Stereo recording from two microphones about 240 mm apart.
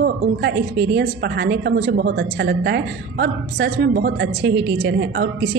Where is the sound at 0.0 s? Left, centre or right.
Right.